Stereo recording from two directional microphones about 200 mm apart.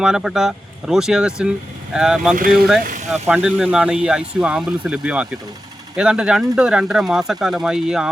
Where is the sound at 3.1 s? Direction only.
5° right (ahead or behind).